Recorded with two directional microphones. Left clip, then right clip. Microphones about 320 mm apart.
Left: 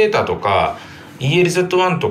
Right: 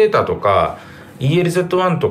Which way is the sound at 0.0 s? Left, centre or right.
Centre.